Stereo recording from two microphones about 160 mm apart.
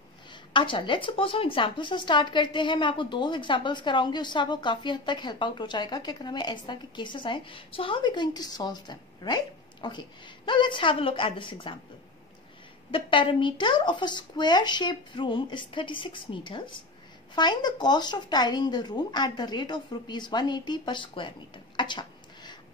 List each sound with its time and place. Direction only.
0.3 s speech: 30° left (ahead or behind)
12.9 s speech: 30° left (ahead or behind)
21.7 s a sound: 30° left (ahead or behind)